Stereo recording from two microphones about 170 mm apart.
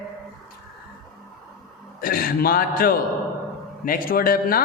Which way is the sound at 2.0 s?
60° left (ahead or behind).